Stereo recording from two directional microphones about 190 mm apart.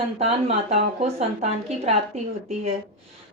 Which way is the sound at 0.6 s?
35° right (ahead or behind).